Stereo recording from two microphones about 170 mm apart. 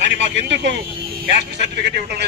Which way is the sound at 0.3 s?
90° right.